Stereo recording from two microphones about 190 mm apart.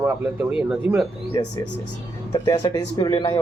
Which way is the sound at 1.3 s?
25° left (ahead or behind).